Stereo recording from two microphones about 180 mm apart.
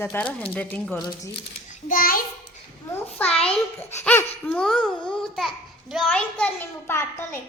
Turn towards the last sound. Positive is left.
turn(degrees=15)  # may be behind; listen again after turning